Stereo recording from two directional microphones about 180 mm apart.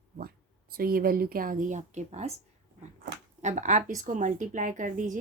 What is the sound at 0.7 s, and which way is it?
Speech, 55° right (ahead or behind).